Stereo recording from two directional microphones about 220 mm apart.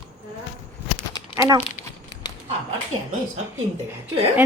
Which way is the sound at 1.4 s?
15° right (ahead or behind).